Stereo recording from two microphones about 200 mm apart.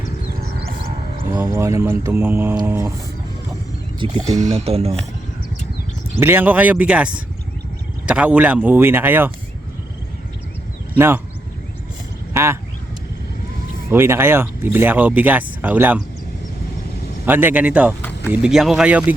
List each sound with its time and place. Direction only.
1.4 s speech: 15° right (ahead or behind)
4.0 s speech: 30° right (ahead or behind)
6.1 s speech: 10° right (ahead or behind)
10.9 s speech: 10° right (ahead or behind)
12.3 s speech: 15° right (ahead or behind)
13.9 s speech: 10° right (ahead or behind)
17.2 s speech: 10° right (ahead or behind)